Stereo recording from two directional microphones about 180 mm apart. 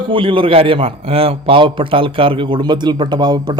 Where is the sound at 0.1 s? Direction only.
30° right (ahead or behind).